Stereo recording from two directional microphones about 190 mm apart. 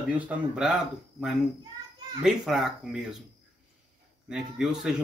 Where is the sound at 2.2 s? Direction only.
Centre (ahead or behind).